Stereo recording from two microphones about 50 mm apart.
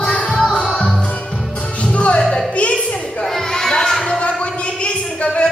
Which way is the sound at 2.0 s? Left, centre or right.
Left.